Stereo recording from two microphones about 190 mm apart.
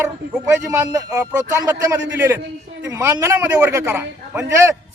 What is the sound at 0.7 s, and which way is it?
Speech, 15° right (ahead or behind).